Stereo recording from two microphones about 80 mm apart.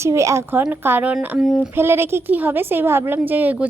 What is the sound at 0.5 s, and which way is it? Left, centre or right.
A woman's voice, right.